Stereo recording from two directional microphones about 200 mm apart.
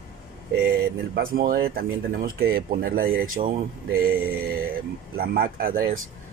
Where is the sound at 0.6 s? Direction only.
50° right (ahead or behind).